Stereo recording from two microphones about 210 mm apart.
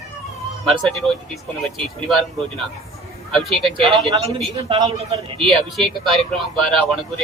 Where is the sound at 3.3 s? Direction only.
Centre (ahead or behind).